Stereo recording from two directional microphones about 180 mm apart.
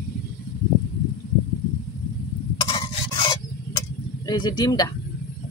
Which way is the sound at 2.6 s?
25° left (ahead or behind).